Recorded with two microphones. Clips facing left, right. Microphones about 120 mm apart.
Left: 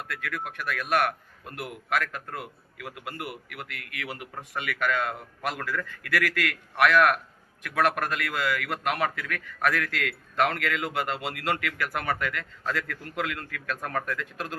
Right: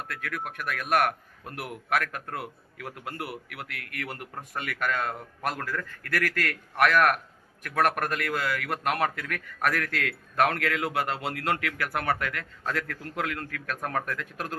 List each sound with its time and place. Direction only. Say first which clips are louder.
0.1 s a man's voice: left 1 dB; 50° right (ahead or behind)
2.8 s a man's voice: even; 5° left (ahead or behind)
3.7 s a man's voice: right 1 dB; 50° right (ahead or behind)